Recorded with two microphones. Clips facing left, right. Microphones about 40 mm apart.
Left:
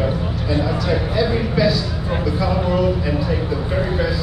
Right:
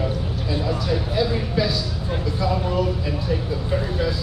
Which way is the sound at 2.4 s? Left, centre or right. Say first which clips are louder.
Left 3 dB; centre.